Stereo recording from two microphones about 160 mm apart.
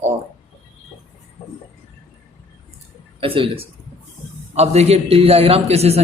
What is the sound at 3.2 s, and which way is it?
A man's voice, 35° right (ahead or behind).